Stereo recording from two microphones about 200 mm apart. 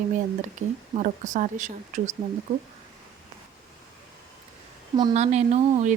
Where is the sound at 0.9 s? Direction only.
40° right (ahead or behind).